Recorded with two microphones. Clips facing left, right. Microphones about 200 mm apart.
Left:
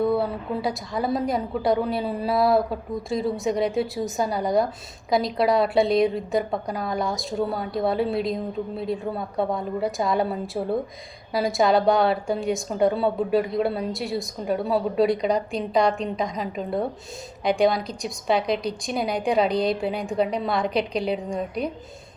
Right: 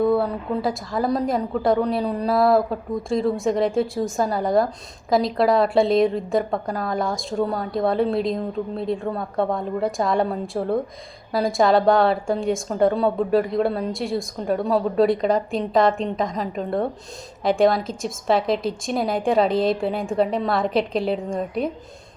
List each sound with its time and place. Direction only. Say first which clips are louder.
0.0 s a woman's voice: right 3 dB; centre (ahead or behind)